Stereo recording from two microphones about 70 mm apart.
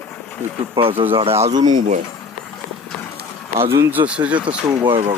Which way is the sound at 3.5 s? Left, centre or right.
Right.